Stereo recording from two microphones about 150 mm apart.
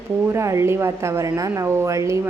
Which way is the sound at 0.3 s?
20° right (ahead or behind).